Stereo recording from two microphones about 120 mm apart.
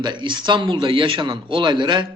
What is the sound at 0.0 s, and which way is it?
A man's voice, 40° right (ahead or behind).